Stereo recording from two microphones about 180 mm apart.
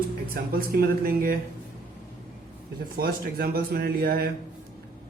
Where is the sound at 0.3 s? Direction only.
55° right (ahead or behind).